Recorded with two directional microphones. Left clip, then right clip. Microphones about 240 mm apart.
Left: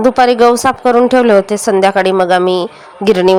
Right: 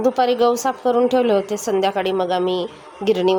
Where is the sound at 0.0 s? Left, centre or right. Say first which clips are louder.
Left 8 dB; left.